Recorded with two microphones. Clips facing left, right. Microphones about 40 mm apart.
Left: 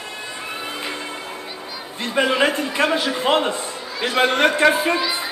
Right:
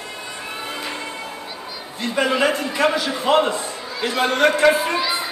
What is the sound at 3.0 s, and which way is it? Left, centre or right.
A man's voice, left.